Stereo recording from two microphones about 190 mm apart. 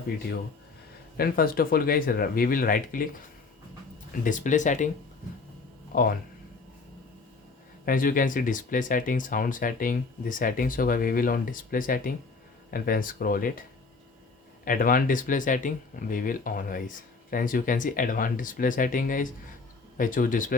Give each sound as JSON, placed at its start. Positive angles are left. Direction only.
{"t": 1.1, "sound": "speech", "side_deg": 50}
{"t": 4.1, "sound": "speech", "side_deg": 45}
{"t": 5.9, "sound": "speech", "side_deg": 50}
{"t": 7.9, "sound": "speech", "side_deg": 45}